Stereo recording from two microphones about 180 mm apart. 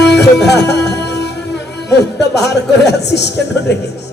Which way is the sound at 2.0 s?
70° left (ahead or behind).